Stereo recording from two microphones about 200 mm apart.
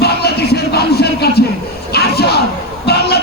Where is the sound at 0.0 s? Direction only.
55° left (ahead or behind).